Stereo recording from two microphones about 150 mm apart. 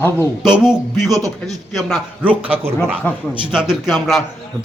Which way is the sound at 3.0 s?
10° left (ahead or behind).